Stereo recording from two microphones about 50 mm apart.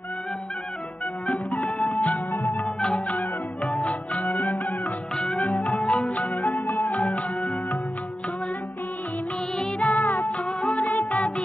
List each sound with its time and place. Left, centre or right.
1.2 s music: left
1.6 s music: centre
2.0 s music: left
2.4 s music: centre
4.2 s music: left
6.5 s music: left
6.9 s music: left
9.8 s music: left
10.6 s music: left